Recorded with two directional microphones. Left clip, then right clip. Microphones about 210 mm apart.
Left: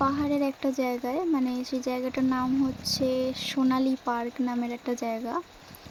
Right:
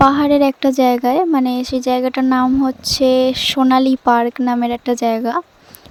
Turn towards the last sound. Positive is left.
turn(degrees=-40)  # may be behind; listen again after turning